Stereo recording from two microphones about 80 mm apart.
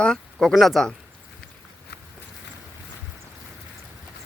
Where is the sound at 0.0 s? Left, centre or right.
Centre.